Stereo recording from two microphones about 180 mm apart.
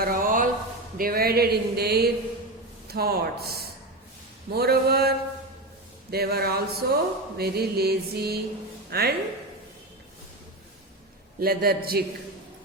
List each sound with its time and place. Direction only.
0.0 s a sound: 50° right (ahead or behind)
0.9 s mantra: 55° right (ahead or behind)
8.9 s speech: 60° right (ahead or behind)
11.3 s mantra: 55° right (ahead or behind)